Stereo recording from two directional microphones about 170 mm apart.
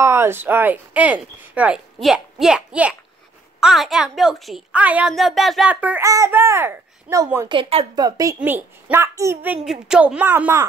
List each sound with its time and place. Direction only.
0.0 s a child's voice: 15° right (ahead or behind)
7.4 s speech: 30° right (ahead or behind)
8.4 s speech: 10° right (ahead or behind)